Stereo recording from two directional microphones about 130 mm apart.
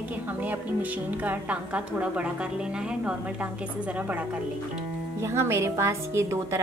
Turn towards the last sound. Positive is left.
turn(degrees=-20)  # may be behind; listen again after turning